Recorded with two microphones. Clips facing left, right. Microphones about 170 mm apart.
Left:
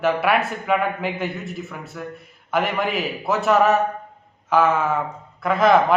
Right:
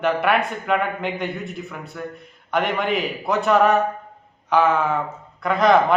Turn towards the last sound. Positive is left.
turn(degrees=5)  # may be behind; listen again after turning